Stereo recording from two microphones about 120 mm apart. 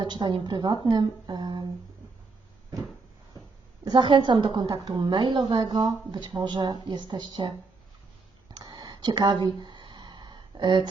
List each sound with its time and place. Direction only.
0.0 s a woman's voice: 40° right (ahead or behind)
3.8 s a woman's voice: 40° right (ahead or behind)
8.5 s a sound: 35° right (ahead or behind)